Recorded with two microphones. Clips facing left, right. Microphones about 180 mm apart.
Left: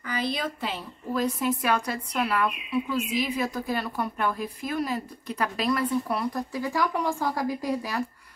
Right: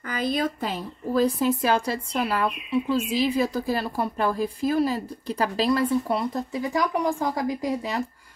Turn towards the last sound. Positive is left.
turn(degrees=-20)  # may be behind; listen again after turning